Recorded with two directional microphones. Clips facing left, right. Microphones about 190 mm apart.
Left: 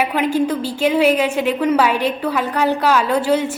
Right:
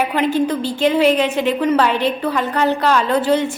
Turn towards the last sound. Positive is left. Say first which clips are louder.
# right 1 dB
turn(degrees=10)  # may be behind; listen again after turning